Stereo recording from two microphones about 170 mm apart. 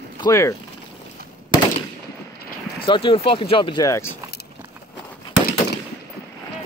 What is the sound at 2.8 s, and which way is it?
Speech, 30° left (ahead or behind).